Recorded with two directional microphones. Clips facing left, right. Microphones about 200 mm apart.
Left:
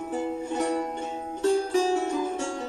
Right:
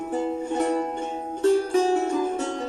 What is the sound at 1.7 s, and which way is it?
Music, 50° right (ahead or behind).